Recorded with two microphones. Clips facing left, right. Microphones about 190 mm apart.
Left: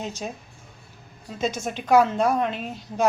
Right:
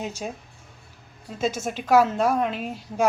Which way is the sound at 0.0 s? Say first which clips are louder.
Even; 10° right (ahead or behind).